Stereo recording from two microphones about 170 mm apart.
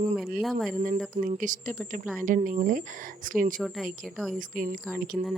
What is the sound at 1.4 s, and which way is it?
Speech, 50° right (ahead or behind).